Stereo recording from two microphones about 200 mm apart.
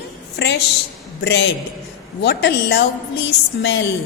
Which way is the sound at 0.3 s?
60° left (ahead or behind).